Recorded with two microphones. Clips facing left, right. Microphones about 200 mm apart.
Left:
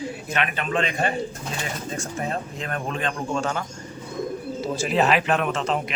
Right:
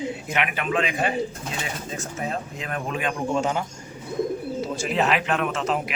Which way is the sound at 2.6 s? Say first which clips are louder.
Right 1 dB; 5° right (ahead or behind).